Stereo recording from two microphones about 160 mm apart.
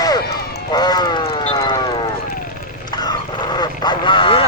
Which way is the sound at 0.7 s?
25° left (ahead or behind).